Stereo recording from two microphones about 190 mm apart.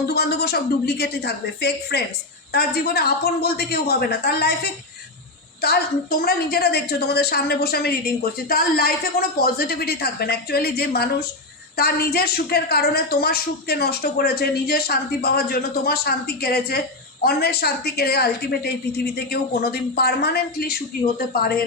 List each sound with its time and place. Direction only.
0.1 s a woman's voice: 60° left (ahead or behind)